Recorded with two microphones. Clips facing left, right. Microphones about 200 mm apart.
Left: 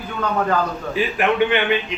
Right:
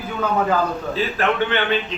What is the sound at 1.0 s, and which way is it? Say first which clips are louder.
Speech: left 3 dB; 15° left (ahead or behind).